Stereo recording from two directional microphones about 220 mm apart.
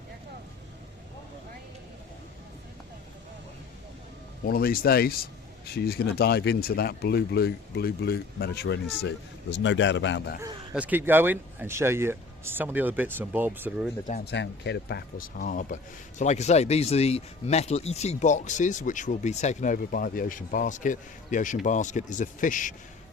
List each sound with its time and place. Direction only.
4.4 s speech: 40° left (ahead or behind)
10.4 s speech: 10° right (ahead or behind)
14.1 s speech: 45° left (ahead or behind)